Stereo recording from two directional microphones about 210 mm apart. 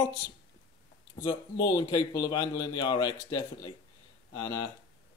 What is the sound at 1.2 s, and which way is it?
Speech, 20° left (ahead or behind).